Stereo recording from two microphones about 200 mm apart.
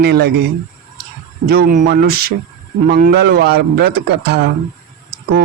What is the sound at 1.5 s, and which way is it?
Speech, 50° right (ahead or behind).